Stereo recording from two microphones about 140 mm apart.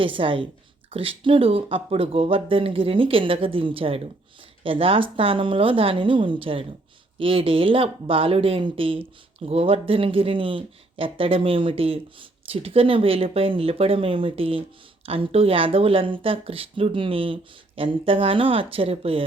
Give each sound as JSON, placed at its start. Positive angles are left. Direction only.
{"t": 0.0, "sound": "speech", "side_deg": -40}